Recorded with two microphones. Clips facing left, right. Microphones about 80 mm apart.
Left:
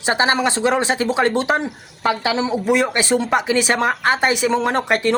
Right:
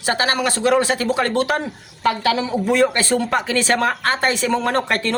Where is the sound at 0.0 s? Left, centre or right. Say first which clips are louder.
Left 2 dB; left.